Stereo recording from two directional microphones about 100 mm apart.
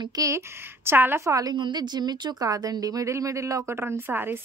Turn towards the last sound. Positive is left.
turn(degrees=-20)  # may be behind; listen again after turning